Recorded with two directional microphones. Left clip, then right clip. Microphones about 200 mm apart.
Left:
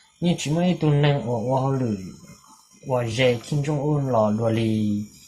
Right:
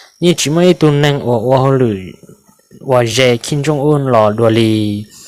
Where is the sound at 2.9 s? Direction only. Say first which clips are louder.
Right 11 dB; 40° right (ahead or behind).